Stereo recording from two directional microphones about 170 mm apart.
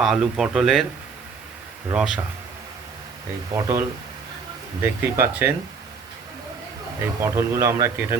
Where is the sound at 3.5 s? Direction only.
15° right (ahead or behind).